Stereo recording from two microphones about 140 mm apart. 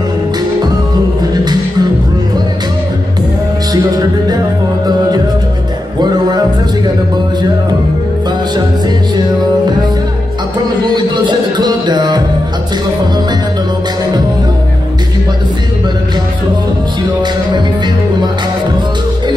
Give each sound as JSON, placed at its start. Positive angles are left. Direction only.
{"t": 1.3, "sound": "music", "side_deg": -30}
{"t": 3.7, "sound": "music", "side_deg": -25}
{"t": 11.0, "sound": "music", "side_deg": -30}